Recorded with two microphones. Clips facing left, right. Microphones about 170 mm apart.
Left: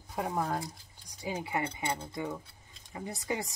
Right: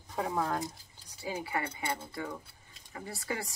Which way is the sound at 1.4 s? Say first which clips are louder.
Left 3 dB; 25° left (ahead or behind).